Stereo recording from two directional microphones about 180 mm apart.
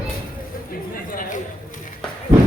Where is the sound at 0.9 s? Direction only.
50° left (ahead or behind).